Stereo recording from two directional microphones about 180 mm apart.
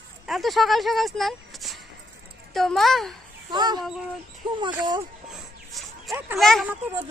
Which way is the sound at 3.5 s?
25° right (ahead or behind).